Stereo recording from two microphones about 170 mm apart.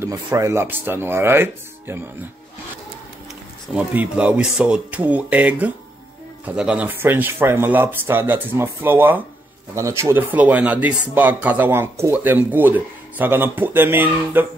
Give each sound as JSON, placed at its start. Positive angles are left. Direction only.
{"t": 0.0, "sound": "speech", "side_deg": -20}
{"t": 3.7, "sound": "speech", "side_deg": -10}